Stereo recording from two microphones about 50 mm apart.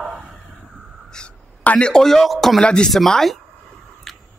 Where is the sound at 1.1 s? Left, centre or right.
Centre.